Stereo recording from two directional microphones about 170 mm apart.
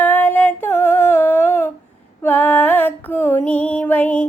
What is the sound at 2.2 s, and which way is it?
Female singing, 10° left (ahead or behind).